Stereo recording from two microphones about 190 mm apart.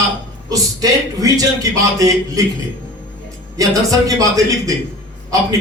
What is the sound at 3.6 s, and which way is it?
Speech, 20° right (ahead or behind).